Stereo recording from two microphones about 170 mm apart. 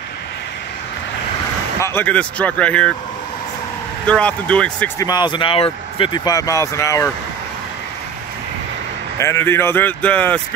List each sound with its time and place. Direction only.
1.8 s speech: 10° left (ahead or behind)
4.1 s speech: 5° left (ahead or behind)
5.0 s speech: 25° left (ahead or behind)
9.2 s speech: 15° left (ahead or behind)